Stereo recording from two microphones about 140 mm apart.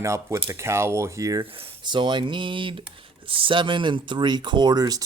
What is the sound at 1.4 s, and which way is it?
Speech, 35° right (ahead or behind).